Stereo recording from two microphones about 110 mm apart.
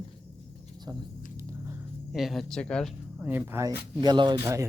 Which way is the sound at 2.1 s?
Centre (ahead or behind).